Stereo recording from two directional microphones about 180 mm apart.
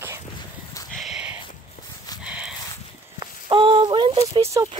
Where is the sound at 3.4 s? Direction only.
30° right (ahead or behind).